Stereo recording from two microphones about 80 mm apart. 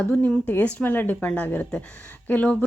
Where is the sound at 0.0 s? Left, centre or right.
Left.